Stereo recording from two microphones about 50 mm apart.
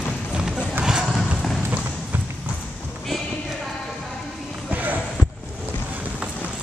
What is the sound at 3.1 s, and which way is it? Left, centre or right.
Clip-clop, centre.